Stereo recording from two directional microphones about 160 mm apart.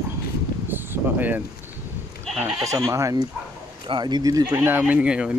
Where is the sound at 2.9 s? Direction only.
20° right (ahead or behind).